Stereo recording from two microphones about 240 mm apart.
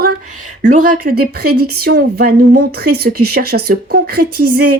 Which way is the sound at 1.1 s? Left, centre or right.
Right.